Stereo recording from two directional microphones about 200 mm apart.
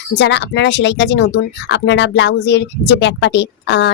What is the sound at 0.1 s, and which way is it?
Speech, 60° left (ahead or behind).